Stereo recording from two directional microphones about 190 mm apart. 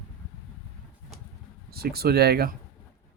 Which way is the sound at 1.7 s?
55° right (ahead or behind).